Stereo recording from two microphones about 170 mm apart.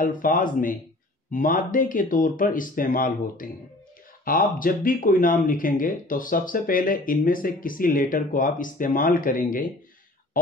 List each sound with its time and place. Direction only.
0.0 s speech: 50° left (ahead or behind)